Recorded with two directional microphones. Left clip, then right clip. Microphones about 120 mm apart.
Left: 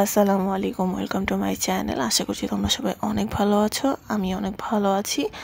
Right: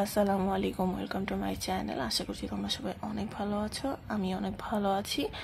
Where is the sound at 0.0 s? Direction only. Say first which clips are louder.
Left 9 dB; 55° left (ahead or behind).